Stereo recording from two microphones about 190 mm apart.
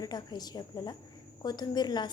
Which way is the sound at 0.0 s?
20° left (ahead or behind).